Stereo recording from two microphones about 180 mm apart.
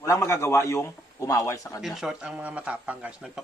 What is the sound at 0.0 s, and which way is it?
A man's voice, 15° left (ahead or behind).